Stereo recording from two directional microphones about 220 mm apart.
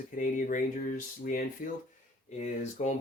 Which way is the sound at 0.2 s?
35° left (ahead or behind).